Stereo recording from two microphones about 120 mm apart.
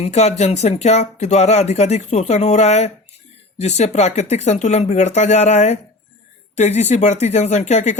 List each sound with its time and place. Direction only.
0.0 s speech: 65° left (ahead or behind)